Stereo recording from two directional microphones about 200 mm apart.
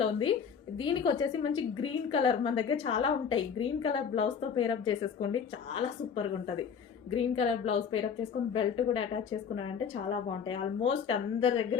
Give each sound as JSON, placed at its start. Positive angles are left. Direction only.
{"t": 0.0, "sound": "a woman's voice", "side_deg": 25}
{"t": 10.1, "sound": "a woman's voice", "side_deg": 30}